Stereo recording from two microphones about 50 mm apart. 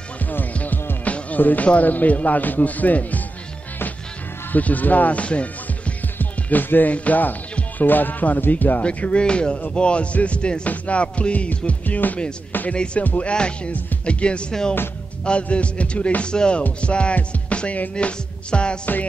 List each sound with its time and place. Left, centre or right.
0.5 s music: left
1.7 s speech: left
4.5 s speech: left
6.1 s speech: left
8.8 s music: left
12.7 s music: left
13.0 s speech: left
13.3 s music: centre
14.5 s speech: centre
15.2 s music: left